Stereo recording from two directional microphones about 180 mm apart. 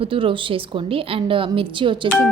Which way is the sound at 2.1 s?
Centre (ahead or behind).